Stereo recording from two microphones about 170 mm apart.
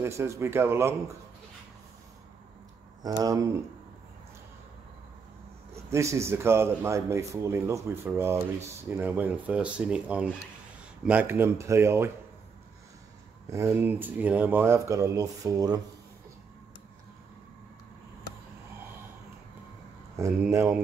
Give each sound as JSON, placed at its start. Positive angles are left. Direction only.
{"t": 0.0, "sound": "a man's voice", "side_deg": -15}
{"t": 3.0, "sound": "speech", "side_deg": -20}
{"t": 5.9, "sound": "a man's voice", "side_deg": -15}
{"t": 13.5, "sound": "a man's voice", "side_deg": -15}
{"t": 20.2, "sound": "a man's voice", "side_deg": -15}